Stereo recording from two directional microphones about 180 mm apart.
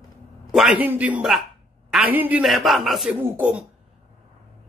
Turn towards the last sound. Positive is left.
turn(degrees=-5)  # may be behind; listen again after turning